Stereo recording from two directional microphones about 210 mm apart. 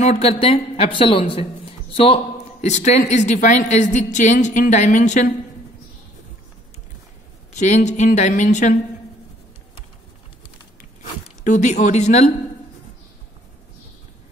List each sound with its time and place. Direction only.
0.0 s a woman's voice: 30° left (ahead or behind)
7.5 s a woman's voice: 35° left (ahead or behind)
11.4 s a woman's voice: 35° left (ahead or behind)